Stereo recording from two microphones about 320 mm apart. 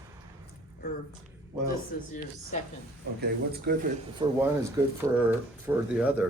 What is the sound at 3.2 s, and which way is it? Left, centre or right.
Speech, right.